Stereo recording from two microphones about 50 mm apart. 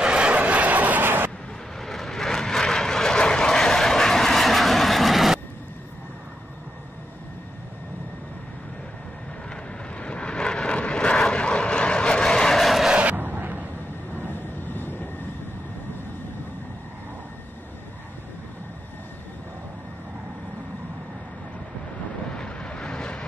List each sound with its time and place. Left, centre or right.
0.0 s vehicle: right
1.8 s vehicle: centre
9.9 s vehicle: left; by 12.9 s centre
13.1 s a sound: right
14.3 s vehicle: left
22.3 s vehicle: centre